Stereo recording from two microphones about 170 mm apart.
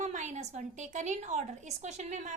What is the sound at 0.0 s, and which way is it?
A woman's voice, 45° right (ahead or behind).